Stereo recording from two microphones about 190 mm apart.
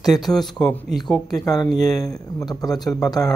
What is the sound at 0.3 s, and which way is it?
Speech, centre (ahead or behind).